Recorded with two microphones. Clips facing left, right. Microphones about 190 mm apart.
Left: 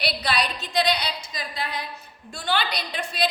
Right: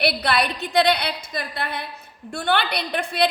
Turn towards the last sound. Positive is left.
turn(degrees=-60)  # may be behind; listen again after turning